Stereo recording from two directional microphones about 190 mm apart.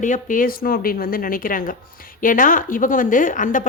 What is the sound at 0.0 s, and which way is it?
A woman's voice, 45° left (ahead or behind).